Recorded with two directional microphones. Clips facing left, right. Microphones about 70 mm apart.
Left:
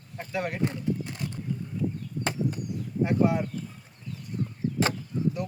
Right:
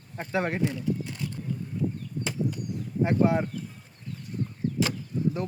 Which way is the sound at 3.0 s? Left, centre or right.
Right.